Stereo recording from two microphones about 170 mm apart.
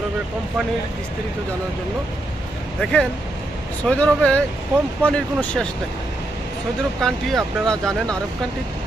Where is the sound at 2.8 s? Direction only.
5° left (ahead or behind).